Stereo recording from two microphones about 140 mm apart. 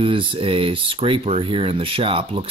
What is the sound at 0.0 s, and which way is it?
Speech, 40° right (ahead or behind).